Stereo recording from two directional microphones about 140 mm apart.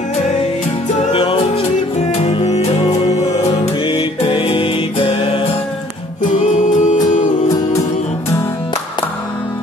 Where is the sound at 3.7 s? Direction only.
35° left (ahead or behind).